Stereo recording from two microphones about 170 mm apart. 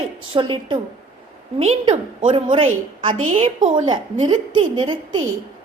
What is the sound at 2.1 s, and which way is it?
A woman's voice, 30° right (ahead or behind).